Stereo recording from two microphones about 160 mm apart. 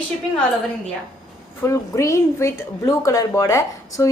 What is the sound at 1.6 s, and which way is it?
Speech, 20° left (ahead or behind).